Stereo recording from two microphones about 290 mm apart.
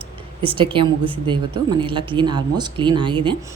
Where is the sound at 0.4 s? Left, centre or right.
Centre.